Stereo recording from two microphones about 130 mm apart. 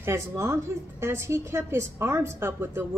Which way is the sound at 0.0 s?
20° right (ahead or behind).